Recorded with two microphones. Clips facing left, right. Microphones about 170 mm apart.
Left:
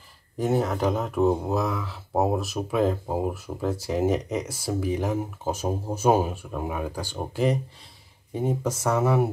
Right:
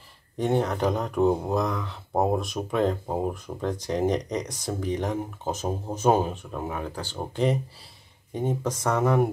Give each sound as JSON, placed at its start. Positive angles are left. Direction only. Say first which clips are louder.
{"t": 0.4, "sound": "speech", "louder": "even", "side_deg": 5}